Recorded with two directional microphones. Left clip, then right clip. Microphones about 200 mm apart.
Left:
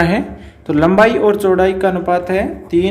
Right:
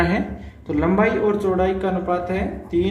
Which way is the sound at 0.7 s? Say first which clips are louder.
Left 8 dB; 40° left (ahead or behind).